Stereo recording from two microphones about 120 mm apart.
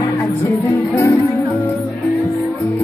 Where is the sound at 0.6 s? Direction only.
20° left (ahead or behind).